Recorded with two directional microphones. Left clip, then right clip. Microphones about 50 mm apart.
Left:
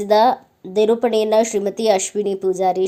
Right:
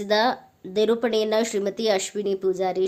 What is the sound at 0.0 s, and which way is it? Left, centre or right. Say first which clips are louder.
Speech: left 7 dB; left.